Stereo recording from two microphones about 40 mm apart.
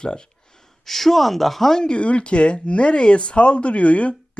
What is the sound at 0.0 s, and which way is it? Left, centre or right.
Speech, left.